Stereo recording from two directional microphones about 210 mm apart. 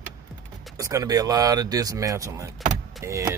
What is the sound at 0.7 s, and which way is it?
Speech, 15° right (ahead or behind).